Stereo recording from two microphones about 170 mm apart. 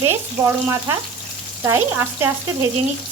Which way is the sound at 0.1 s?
15° right (ahead or behind).